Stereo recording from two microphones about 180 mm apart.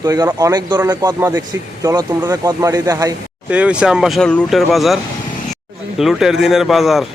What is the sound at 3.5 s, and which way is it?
Speech, 5° right (ahead or behind).